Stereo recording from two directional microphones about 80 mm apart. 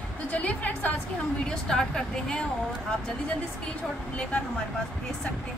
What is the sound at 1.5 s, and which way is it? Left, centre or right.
Speech, centre.